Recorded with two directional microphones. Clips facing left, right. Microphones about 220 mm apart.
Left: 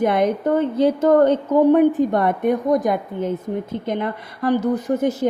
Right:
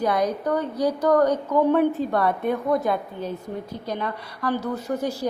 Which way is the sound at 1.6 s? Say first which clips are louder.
Left 6 dB; 15° left (ahead or behind).